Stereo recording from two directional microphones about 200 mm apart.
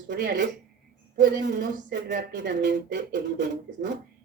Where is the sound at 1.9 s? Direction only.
50° right (ahead or behind).